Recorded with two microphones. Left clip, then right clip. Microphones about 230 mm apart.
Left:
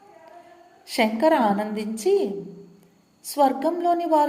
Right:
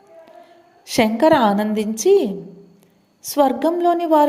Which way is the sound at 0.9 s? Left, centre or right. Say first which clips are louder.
Right 5 dB; right.